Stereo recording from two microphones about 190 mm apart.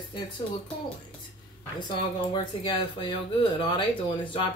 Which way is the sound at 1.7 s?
25° left (ahead or behind).